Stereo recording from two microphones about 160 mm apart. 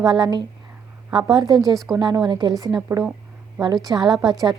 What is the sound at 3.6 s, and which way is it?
Speech, 25° right (ahead or behind).